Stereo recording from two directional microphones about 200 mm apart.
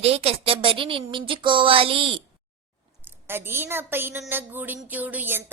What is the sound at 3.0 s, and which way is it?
A woman's voice, 10° right (ahead or behind).